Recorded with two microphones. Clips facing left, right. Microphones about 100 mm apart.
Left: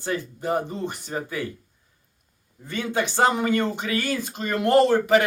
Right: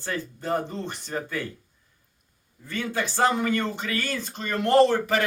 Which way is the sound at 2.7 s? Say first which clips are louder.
Left 3 dB; 20° left (ahead or behind).